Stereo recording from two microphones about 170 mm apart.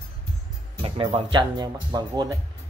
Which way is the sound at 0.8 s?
30° right (ahead or behind).